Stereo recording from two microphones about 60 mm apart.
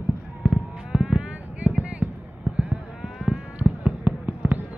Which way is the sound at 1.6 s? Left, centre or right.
Right.